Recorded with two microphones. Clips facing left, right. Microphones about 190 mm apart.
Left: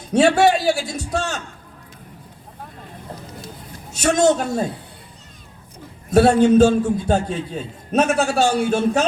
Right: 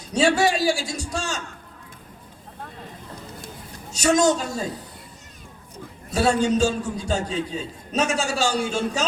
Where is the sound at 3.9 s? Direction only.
60° left (ahead or behind).